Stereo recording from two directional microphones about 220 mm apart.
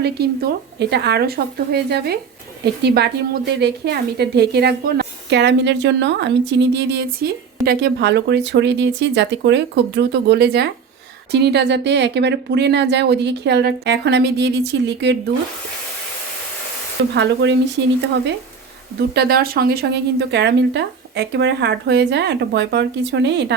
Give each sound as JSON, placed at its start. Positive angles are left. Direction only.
{"t": 0.0, "sound": "a woman's voice", "side_deg": -50}
{"t": 17.2, "sound": "a woman's voice", "side_deg": -55}
{"t": 18.9, "sound": "a woman's voice", "side_deg": -45}